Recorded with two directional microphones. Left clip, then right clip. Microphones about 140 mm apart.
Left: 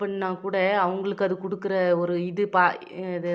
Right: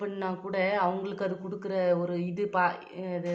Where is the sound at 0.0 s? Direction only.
25° left (ahead or behind).